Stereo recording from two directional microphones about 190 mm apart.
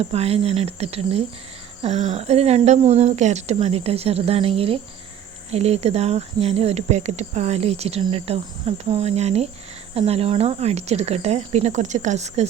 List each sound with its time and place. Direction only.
0.0 s speech: 35° right (ahead or behind)